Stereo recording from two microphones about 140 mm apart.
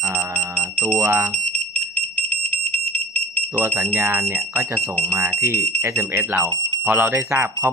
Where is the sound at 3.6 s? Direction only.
15° right (ahead or behind).